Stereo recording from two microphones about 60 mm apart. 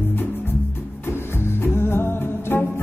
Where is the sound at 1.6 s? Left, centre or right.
Left.